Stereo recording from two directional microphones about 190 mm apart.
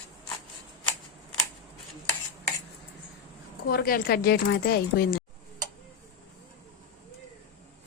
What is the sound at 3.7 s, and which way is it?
Speech, 50° left (ahead or behind).